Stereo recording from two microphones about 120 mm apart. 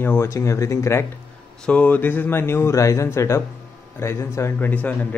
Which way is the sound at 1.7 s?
10° left (ahead or behind).